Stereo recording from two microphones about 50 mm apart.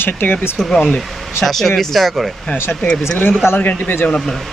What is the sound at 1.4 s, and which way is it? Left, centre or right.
Speech, centre.